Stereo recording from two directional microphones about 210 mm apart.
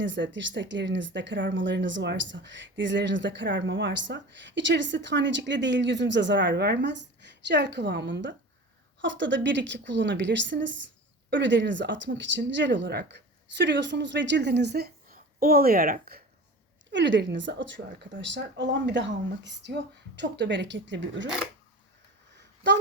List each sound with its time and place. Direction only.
0.0 s speech: 60° right (ahead or behind); by 16.2 s 45° right (ahead or behind)
16.9 s speech: 60° right (ahead or behind)